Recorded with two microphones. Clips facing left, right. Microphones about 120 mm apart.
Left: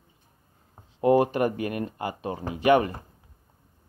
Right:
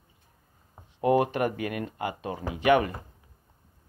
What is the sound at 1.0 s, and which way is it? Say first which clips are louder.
Speech: left 3 dB; 30° left (ahead or behind).